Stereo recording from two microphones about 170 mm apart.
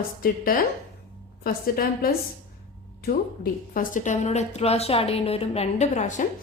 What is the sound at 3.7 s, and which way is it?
A woman's voice, 50° left (ahead or behind).